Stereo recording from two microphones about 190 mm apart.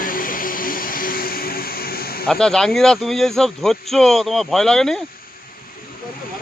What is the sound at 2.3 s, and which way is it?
Speech, 5° left (ahead or behind).